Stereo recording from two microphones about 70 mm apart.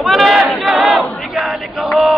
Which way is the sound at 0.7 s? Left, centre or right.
Centre.